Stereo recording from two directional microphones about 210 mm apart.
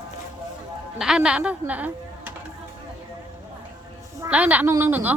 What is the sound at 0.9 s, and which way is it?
A woman's voice, 5° right (ahead or behind).